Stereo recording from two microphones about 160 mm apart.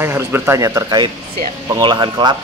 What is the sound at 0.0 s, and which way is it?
Speech, 15° right (ahead or behind).